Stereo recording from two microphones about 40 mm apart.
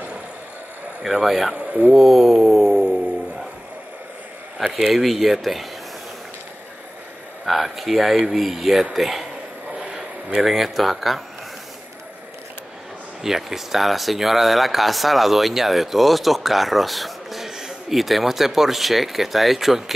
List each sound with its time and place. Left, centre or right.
1.2 s speech: centre
1.5 s speech: right
2.0 s a sound: centre
4.6 s speech: centre
7.4 s speech: centre
9.9 s a sound: centre
10.5 s speech: centre
13.2 s speech: centre